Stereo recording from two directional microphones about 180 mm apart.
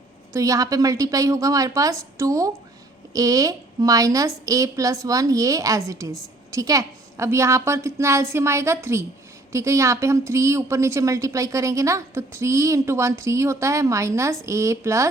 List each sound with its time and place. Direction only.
0.3 s a woman's voice: 20° right (ahead or behind)